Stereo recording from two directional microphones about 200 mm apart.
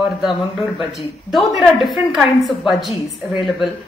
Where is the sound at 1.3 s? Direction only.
Centre (ahead or behind).